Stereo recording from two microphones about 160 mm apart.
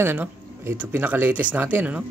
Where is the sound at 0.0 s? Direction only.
15° right (ahead or behind).